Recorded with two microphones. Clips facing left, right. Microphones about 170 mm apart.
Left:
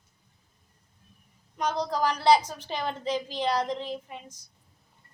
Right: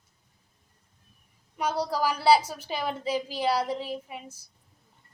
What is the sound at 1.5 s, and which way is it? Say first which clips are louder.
A woman's voice: even; 10° right (ahead or behind).